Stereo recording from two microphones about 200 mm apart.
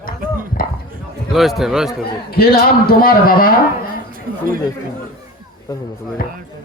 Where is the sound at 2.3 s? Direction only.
50° left (ahead or behind).